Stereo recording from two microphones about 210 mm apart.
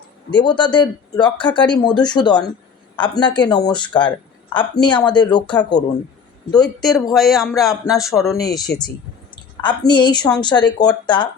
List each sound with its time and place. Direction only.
0.3 s a woman's voice: 20° left (ahead or behind)
6.6 s speech: centre (ahead or behind)
8.2 s a woman's voice: 15° left (ahead or behind)